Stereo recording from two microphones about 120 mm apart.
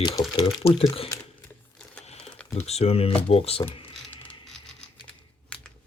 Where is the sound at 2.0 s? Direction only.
60° left (ahead or behind).